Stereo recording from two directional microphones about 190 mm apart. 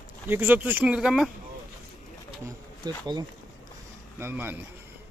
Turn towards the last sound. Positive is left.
turn(degrees=-10)  # may be behind; listen again after turning